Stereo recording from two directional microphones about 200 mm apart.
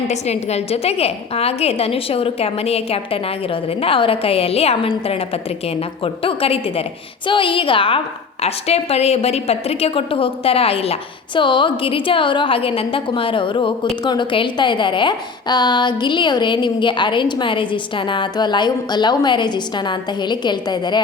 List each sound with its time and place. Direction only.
0.1 s a woman's voice: 35° left (ahead or behind)